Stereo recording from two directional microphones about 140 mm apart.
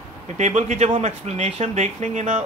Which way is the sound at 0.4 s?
55° right (ahead or behind).